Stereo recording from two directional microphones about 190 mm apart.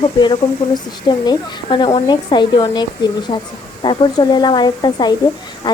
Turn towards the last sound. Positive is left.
turn(degrees=20)  # may be behind; listen again after turning